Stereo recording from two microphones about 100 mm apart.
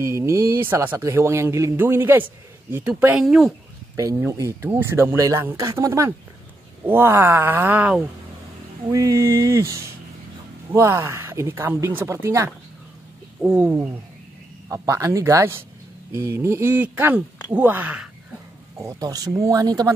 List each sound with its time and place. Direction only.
0.0 s speech: 30° right (ahead or behind)
3.2 s speech: 5° right (ahead or behind)
3.9 s speech: 35° right (ahead or behind); by 8.0 s 15° right (ahead or behind)
8.9 s speech: 35° right (ahead or behind)
13.4 s speech: 10° right (ahead or behind)
14.7 s speech: 30° right (ahead or behind); by 18.1 s 15° right (ahead or behind)
18.8 s speech: 35° right (ahead or behind)